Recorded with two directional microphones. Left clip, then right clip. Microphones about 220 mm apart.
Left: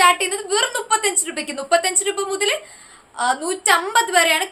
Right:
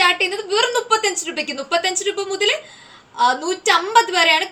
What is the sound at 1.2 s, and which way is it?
Speech, 20° left (ahead or behind).